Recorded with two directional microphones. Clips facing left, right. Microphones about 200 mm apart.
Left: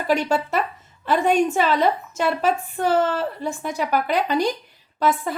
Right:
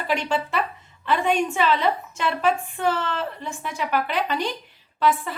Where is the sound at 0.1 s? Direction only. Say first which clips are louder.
Left 4 dB; 45° left (ahead or behind).